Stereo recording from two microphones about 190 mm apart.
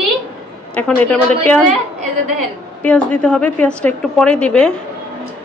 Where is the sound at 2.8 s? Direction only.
5° left (ahead or behind).